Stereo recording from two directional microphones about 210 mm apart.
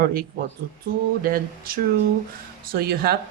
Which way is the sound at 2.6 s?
45° right (ahead or behind).